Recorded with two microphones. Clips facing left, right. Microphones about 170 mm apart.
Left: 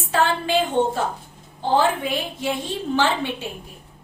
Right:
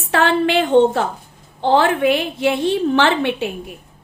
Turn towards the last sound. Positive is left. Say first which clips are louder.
# right 5 dB
turn(degrees=-70)  # may be behind; listen again after turning